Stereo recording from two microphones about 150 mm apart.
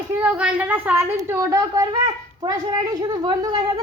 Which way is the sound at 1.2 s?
20° right (ahead or behind).